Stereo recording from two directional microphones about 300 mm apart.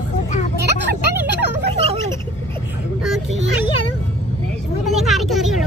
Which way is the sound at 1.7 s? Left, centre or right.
Centre.